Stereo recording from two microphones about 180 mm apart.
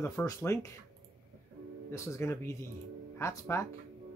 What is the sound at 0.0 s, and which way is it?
Speech, 15° left (ahead or behind).